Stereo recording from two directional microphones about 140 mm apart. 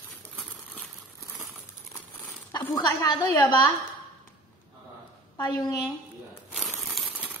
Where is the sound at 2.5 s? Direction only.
30° left (ahead or behind).